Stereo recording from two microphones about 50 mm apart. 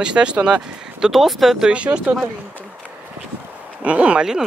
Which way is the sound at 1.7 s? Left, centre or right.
Right.